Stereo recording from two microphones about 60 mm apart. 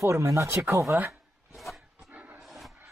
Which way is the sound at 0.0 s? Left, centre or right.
Right.